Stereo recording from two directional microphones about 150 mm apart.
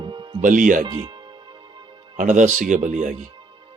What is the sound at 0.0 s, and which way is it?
Music, 35° right (ahead or behind).